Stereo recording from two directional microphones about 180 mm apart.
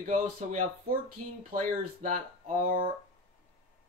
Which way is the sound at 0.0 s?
45° right (ahead or behind).